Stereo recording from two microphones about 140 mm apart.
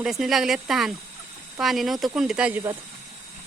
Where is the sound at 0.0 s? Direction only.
Centre (ahead or behind).